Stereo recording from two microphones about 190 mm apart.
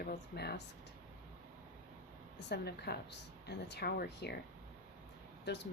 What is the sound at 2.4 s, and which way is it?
Speech, 60° left (ahead or behind).